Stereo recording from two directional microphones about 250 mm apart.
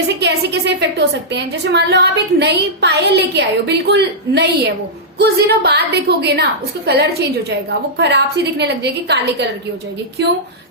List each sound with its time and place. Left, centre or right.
0.2 s a woman's voice: right